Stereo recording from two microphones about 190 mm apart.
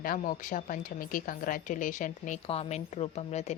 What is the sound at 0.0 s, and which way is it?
A woman's voice, 45° left (ahead or behind).